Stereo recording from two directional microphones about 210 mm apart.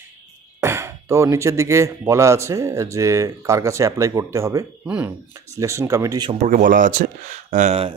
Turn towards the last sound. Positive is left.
turn(degrees=-35)  # may be behind; listen again after turning